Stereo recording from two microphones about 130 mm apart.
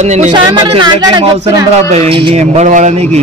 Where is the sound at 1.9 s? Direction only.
55° right (ahead or behind).